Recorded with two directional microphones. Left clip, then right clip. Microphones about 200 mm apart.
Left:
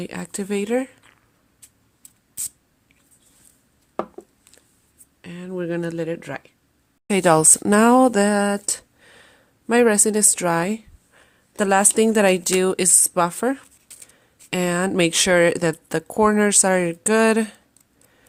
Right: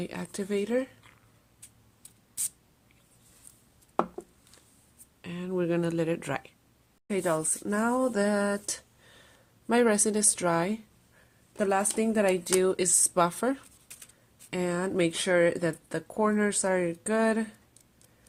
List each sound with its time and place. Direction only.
0.0 s speech: 30° left (ahead or behind)
5.2 s speech: 15° left (ahead or behind)
7.1 s speech: 45° left (ahead or behind)
11.5 s speech: 45° left (ahead or behind); by 13.7 s 25° left (ahead or behind)
14.5 s speech: 40° left (ahead or behind)